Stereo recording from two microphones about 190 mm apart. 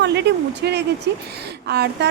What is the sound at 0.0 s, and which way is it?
A woman's voice, 65° right (ahead or behind).